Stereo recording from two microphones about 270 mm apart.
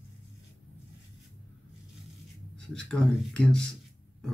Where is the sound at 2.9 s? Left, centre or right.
Centre.